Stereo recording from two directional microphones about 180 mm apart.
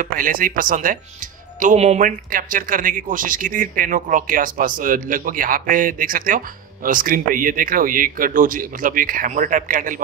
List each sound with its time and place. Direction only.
0.0 s speech: 50° right (ahead or behind)